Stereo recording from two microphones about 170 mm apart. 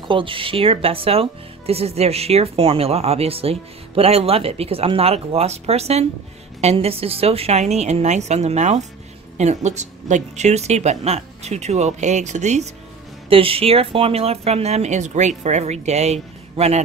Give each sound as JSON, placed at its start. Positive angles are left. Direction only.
{"t": 0.1, "sound": "speech", "side_deg": -30}